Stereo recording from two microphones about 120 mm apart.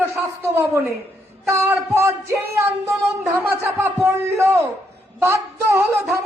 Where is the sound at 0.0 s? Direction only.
20° right (ahead or behind).